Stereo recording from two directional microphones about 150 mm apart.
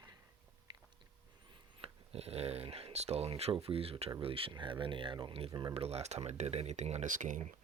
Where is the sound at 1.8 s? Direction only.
40° right (ahead or behind).